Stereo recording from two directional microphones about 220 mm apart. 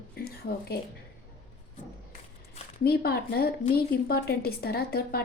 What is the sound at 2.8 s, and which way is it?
A woman's voice, 45° left (ahead or behind).